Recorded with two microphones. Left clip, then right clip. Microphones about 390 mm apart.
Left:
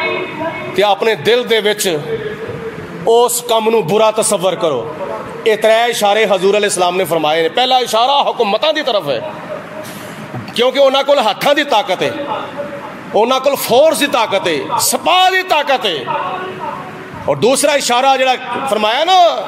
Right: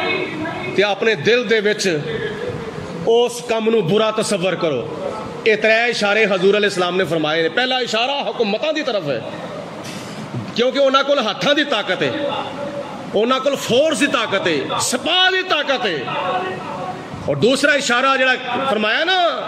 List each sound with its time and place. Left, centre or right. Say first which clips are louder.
0.7 s a man's voice: left 4 dB; centre
3.1 s speech: left 5 dB; left
4.0 s a man's voice: left 6 dB; centre
5.4 s a man's voice: left 4 dB; centre
10.5 s a man's voice: left 4 dB; centre
13.2 s a man's voice: left 5 dB; centre
17.4 s a man's voice: left 2 dB; centre